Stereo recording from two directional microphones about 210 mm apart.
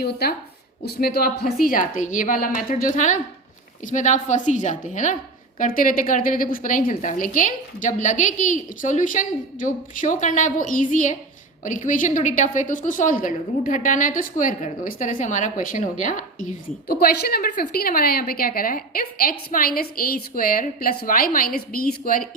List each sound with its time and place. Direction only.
0.0 s a woman's voice: 45° left (ahead or behind)